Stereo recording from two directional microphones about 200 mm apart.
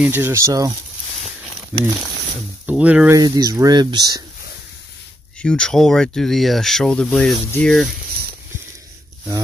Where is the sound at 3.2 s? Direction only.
20° right (ahead or behind).